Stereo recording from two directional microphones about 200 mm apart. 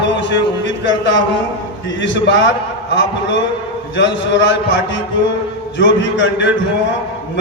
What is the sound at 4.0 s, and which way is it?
A man's voice, 65° left (ahead or behind).